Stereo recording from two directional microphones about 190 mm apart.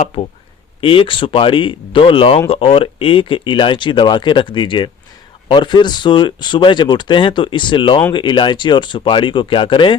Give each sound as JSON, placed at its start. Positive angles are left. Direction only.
{"t": 0.0, "sound": "speech", "side_deg": 35}